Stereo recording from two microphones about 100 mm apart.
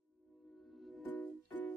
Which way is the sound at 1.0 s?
15° left (ahead or behind).